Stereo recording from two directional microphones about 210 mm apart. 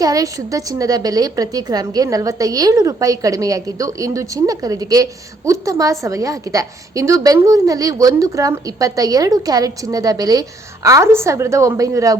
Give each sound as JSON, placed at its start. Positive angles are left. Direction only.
{"t": 0.0, "sound": "a woman's voice", "side_deg": -15}